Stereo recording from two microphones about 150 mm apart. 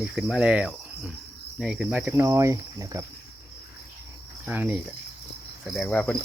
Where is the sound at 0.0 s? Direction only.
5° right (ahead or behind); by 3.0 s 20° right (ahead or behind).